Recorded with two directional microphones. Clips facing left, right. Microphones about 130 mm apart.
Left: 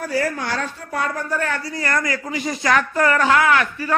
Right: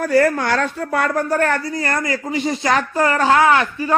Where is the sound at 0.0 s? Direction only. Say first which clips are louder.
Right 7 dB; 60° right (ahead or behind).